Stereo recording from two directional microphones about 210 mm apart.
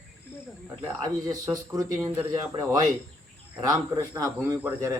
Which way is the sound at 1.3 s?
15° right (ahead or behind).